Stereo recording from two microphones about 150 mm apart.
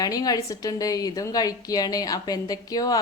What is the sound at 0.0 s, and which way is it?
A woman's voice, 25° left (ahead or behind).